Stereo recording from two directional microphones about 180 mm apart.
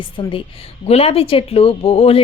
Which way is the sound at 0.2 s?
30° left (ahead or behind).